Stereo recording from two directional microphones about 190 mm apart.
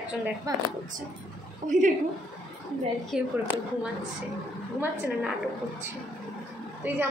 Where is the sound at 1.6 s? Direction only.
40° right (ahead or behind).